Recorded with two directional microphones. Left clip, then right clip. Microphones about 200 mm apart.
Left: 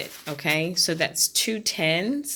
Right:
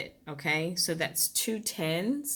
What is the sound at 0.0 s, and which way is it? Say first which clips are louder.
Speech: left 6 dB; 20° left (ahead or behind).